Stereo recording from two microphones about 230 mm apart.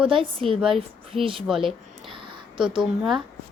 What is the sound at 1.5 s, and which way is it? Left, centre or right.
Speech, centre.